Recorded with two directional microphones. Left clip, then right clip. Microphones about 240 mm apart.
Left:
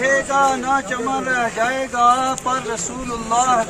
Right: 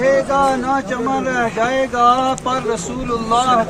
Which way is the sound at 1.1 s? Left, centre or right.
Centre.